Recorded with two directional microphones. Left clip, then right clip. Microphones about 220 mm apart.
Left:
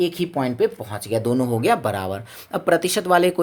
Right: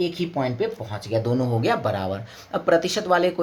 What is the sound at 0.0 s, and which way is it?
Speech, 50° left (ahead or behind).